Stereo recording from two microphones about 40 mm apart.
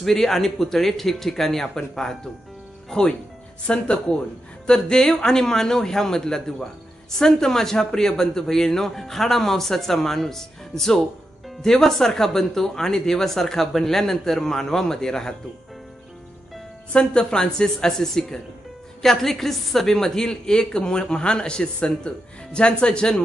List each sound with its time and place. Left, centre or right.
0.0 s a man's voice: centre
16.9 s a woman's voice: left